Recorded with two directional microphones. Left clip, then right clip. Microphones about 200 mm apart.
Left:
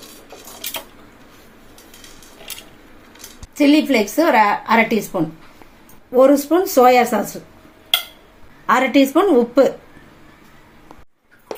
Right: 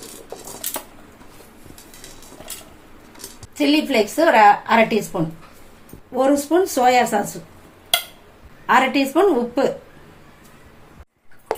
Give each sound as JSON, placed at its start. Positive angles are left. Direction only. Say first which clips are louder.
{"t": 3.6, "sound": "a woman's voice", "louder": "left 3 dB", "side_deg": 15}
{"t": 8.6, "sound": "a woman's voice", "louder": "left 2 dB", "side_deg": 20}